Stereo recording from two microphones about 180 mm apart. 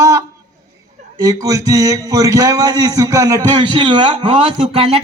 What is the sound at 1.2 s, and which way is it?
A man's voice, 20° right (ahead or behind).